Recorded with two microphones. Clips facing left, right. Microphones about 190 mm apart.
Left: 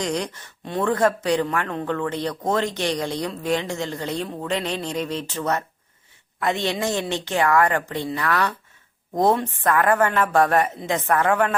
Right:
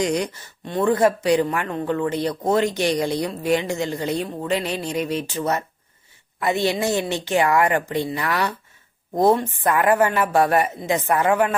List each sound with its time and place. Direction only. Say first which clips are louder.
0.0 s speech: right 4 dB; 10° right (ahead or behind)